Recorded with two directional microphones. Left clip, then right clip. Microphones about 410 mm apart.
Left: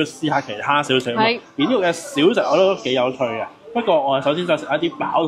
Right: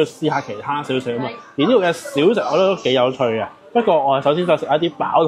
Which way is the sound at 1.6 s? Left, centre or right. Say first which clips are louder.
Right 4 dB; right.